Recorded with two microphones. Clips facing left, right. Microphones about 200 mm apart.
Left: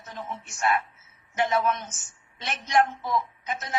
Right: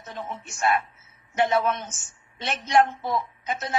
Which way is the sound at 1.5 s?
30° right (ahead or behind).